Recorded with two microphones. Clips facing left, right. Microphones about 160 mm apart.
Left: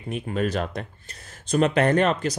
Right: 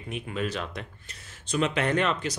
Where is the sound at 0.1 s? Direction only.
45° left (ahead or behind).